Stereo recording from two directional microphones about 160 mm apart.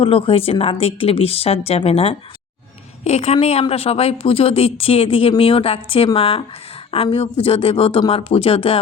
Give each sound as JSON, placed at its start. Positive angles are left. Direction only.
{"t": 0.0, "sound": "speech", "side_deg": 35}